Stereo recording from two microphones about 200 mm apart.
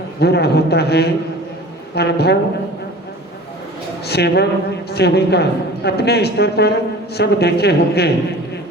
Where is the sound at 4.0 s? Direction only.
55° left (ahead or behind).